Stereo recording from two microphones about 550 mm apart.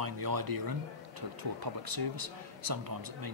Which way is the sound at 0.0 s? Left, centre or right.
Right.